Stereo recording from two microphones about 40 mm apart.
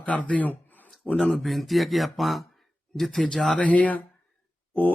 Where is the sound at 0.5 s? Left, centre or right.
Left.